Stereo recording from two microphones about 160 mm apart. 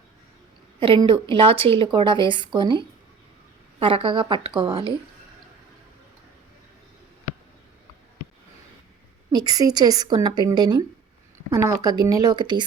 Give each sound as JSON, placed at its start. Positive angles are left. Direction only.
{"t": 0.8, "sound": "a woman's voice", "side_deg": -30}
{"t": 9.3, "sound": "a woman's voice", "side_deg": -25}